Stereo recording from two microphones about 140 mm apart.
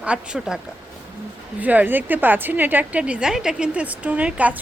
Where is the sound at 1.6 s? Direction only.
10° right (ahead or behind).